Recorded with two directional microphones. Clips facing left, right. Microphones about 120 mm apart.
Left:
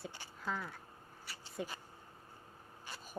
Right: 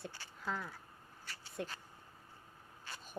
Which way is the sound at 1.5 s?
10° left (ahead or behind).